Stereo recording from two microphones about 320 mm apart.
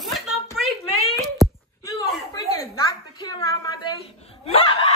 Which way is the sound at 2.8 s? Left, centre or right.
Centre.